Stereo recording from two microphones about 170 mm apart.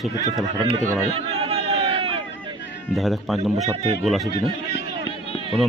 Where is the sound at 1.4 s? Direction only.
35° right (ahead or behind).